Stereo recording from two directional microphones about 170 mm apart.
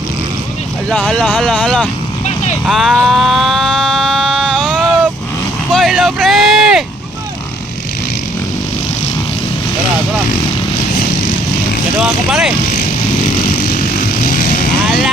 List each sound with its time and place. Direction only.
0.9 s speech: 5° left (ahead or behind)
2.6 s a sound: centre (ahead or behind)
5.7 s vehicle: centre (ahead or behind)
11.9 s speech: 5° right (ahead or behind)
14.3 s vehicle: 60° left (ahead or behind)